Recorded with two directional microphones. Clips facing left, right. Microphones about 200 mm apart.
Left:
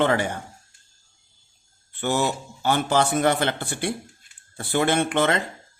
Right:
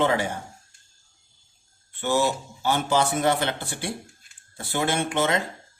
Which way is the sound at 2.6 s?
55° left (ahead or behind).